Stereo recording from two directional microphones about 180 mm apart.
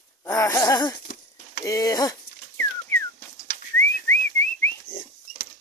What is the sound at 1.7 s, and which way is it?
Dog, 20° left (ahead or behind).